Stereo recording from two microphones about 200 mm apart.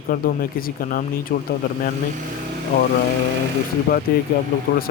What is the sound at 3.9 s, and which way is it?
Speech, 45° left (ahead or behind).